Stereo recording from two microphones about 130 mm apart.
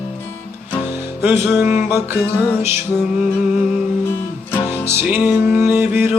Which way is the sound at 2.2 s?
15° left (ahead or behind).